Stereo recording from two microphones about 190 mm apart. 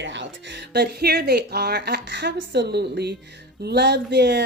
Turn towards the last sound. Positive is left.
turn(degrees=-65)  # may be behind; listen again after turning